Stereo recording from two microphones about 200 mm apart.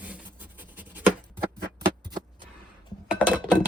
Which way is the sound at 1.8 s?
20° right (ahead or behind).